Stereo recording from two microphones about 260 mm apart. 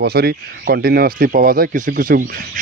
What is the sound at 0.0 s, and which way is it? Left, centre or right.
Speech, right.